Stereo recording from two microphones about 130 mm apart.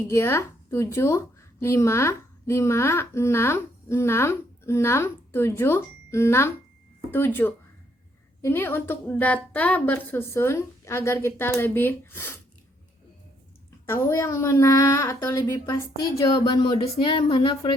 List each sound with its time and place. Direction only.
0.1 s a woman's voice: 20° left (ahead or behind)
13.8 s speech: 20° left (ahead or behind); by 17.7 s 40° left (ahead or behind)